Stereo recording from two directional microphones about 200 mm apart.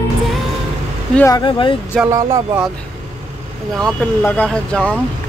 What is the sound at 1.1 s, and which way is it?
Speech, 15° left (ahead or behind).